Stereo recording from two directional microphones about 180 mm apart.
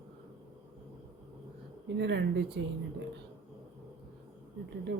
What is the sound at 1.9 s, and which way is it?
Speech, 75° right (ahead or behind).